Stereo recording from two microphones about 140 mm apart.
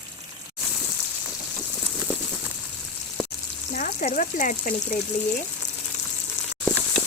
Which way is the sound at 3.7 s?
65° left (ahead or behind).